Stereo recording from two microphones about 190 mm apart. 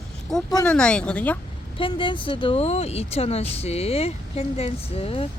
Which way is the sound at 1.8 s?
25° left (ahead or behind).